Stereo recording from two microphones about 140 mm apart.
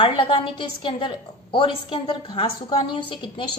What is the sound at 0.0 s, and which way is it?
A woman's voice, 35° left (ahead or behind).